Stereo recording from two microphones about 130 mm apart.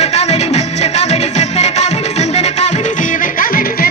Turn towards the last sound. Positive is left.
turn(degrees=90)